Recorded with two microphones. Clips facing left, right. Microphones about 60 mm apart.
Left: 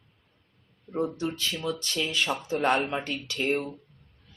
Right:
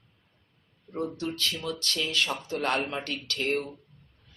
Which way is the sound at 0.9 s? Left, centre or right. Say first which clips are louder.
Left 3 dB; centre.